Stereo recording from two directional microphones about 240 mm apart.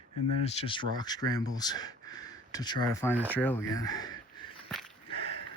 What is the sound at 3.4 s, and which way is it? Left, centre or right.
Speech, centre.